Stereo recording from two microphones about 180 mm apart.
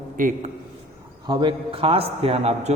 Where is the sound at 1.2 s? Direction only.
30° right (ahead or behind).